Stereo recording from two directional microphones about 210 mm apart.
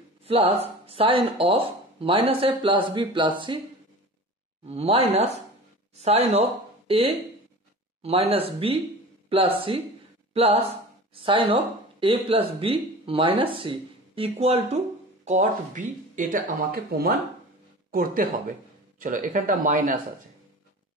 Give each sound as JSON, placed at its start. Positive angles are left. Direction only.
{"t": 0.2, "sound": "speech", "side_deg": -30}
{"t": 4.6, "sound": "speech", "side_deg": -30}
{"t": 8.0, "sound": "speech", "side_deg": -30}